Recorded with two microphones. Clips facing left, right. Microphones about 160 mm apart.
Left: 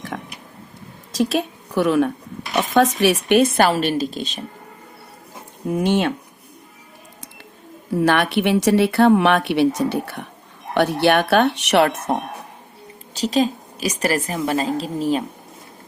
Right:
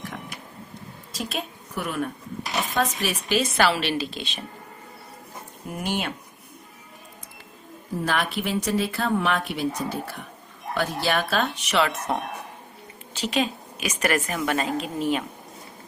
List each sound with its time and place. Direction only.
0.1 s a sound: 75° left (ahead or behind)
1.2 s a woman's voice: 80° left; by 4.4 s 45° left (ahead or behind)
5.7 s speech: 85° left
7.9 s speech: 70° left (ahead or behind); by 12.1 s 55° left (ahead or behind)
13.1 s a woman's voice: 40° left (ahead or behind)